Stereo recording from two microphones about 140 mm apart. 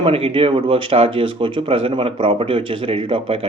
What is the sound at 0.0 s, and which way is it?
A man's voice, 40° right (ahead or behind).